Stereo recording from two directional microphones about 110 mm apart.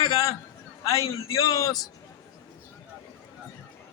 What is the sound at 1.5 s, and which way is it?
Speech, 30° left (ahead or behind).